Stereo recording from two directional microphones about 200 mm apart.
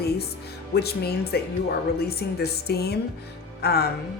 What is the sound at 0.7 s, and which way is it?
A woman's voice, 55° left (ahead or behind).